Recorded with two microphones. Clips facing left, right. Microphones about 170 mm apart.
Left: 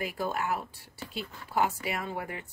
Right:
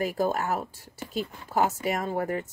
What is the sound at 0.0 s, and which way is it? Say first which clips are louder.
Speech: right 6 dB; 40° right (ahead or behind).